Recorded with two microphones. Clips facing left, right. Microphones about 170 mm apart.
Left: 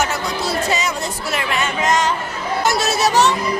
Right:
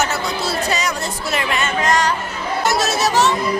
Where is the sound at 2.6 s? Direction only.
Centre (ahead or behind).